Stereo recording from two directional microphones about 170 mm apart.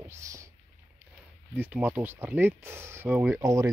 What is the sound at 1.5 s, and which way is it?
Speech, 10° right (ahead or behind).